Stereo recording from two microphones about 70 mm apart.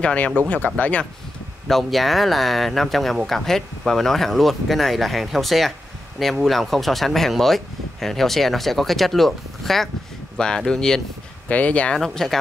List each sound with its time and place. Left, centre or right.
0.0 s speech: centre
1.7 s speech: centre
11.4 s speech: centre
12.0 s speech: centre